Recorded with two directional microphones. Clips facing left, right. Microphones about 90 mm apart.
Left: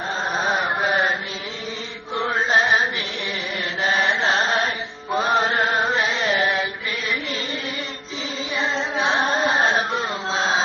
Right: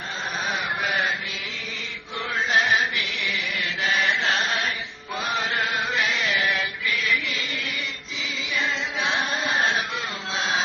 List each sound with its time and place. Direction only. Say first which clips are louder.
0.3 s chant: left 5 dB; 35° left (ahead or behind)
2.1 s chant: left 4 dB; 35° left (ahead or behind)
3.8 s chant: left 3 dB; 30° left (ahead or behind)
8.5 s music: left 4 dB; 30° left (ahead or behind)